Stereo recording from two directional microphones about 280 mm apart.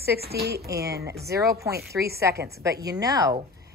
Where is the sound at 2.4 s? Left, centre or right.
Centre.